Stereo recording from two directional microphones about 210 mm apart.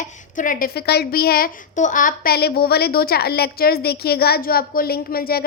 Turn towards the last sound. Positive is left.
turn(degrees=45)  # may be behind; listen again after turning